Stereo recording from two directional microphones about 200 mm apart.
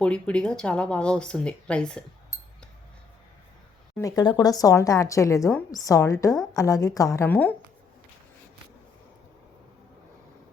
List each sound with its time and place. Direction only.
0.0 s speech: 5° left (ahead or behind)
3.9 s speech: 15° left (ahead or behind)